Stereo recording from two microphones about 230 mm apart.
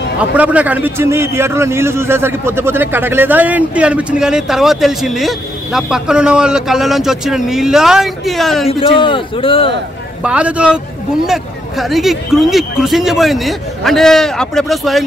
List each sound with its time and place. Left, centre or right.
0.4 s a man's voice: centre
8.6 s a man's voice: left
10.2 s a man's voice: centre